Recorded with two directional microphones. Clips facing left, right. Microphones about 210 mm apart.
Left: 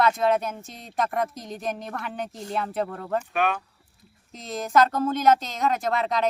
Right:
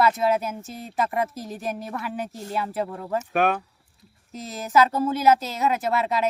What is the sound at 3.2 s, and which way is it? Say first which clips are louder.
Speech: right 7 dB; 45° right (ahead or behind).